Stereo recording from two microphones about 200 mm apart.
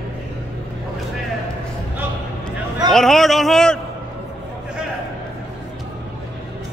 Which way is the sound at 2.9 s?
Centre (ahead or behind).